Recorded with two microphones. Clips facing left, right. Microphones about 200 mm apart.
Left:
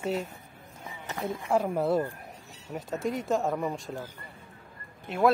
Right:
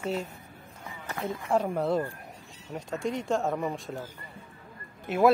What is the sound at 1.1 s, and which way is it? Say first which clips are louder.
Speech: even; 15° left (ahead or behind).